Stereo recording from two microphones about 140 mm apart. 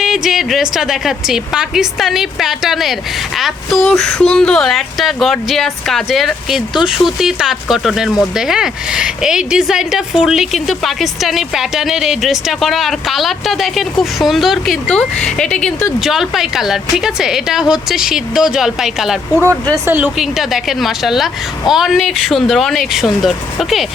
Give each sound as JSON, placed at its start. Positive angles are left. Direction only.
{"t": 0.0, "sound": "speech", "side_deg": 0}
{"t": 19.7, "sound": "speech", "side_deg": -15}
{"t": 20.1, "sound": "speech", "side_deg": 0}